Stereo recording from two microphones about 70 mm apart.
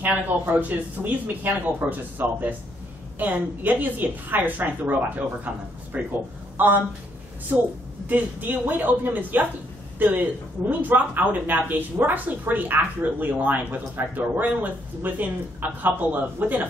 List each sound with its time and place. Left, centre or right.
0.0 s speech: right